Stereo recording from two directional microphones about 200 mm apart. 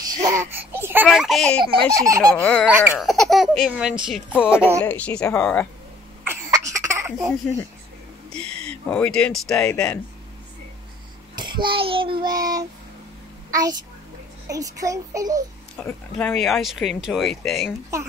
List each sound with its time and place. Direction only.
0.1 s speech: 15° right (ahead or behind); by 1.6 s centre (ahead or behind)
1.6 s speech: 20° right (ahead or behind)
2.4 s speech: 5° left (ahead or behind)
4.8 s a woman's voice: 5° left (ahead or behind)
6.2 s cough: 15° right (ahead or behind)
8.3 s speech: 5° left (ahead or behind)
11.3 s child singing: 20° right (ahead or behind)
13.5 s a child's voice: 20° right (ahead or behind)
15.7 s speech: 5° left (ahead or behind)